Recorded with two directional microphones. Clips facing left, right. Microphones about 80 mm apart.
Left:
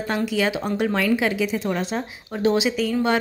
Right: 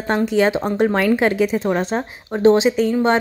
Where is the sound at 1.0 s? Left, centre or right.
Right.